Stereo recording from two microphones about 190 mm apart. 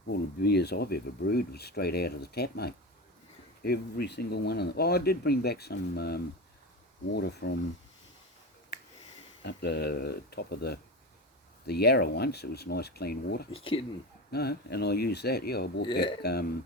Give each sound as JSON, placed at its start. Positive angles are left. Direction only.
{"t": 0.0, "sound": "speech", "side_deg": 60}
{"t": 9.4, "sound": "speech", "side_deg": 60}
{"t": 13.5, "sound": "speech", "side_deg": 30}
{"t": 14.3, "sound": "speech", "side_deg": 55}
{"t": 15.9, "sound": "speech", "side_deg": 25}
{"t": 16.2, "sound": "speech", "side_deg": 55}